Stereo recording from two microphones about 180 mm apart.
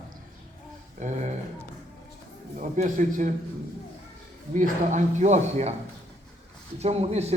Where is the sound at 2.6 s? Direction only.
45° right (ahead or behind).